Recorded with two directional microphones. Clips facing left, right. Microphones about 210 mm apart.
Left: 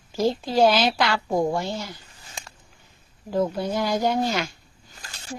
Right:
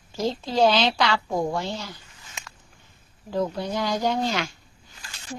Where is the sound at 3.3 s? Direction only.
10° left (ahead or behind).